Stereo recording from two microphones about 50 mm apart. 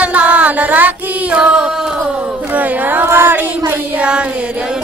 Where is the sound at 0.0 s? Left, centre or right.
Right.